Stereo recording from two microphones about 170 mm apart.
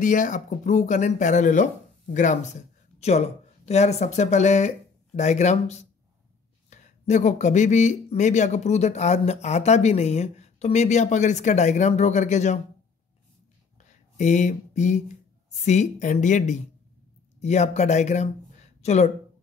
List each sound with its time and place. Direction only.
0.0 s speech: 50° left (ahead or behind)
13.7 s a sound: 45° left (ahead or behind)
15.6 s speech: 45° left (ahead or behind)